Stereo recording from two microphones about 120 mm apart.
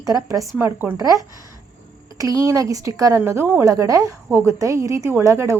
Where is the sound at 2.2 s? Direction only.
25° right (ahead or behind).